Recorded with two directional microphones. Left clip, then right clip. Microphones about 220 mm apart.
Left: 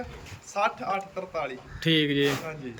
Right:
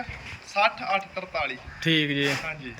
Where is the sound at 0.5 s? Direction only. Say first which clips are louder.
Right 4 dB; 20° left (ahead or behind).